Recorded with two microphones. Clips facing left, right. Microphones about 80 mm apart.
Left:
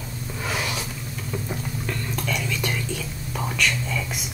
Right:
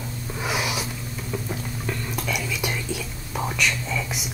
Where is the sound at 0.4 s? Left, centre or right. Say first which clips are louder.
Right 2 dB; centre.